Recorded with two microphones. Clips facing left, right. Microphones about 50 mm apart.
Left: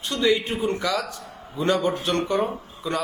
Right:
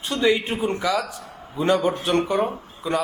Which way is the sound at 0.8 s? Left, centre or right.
Centre.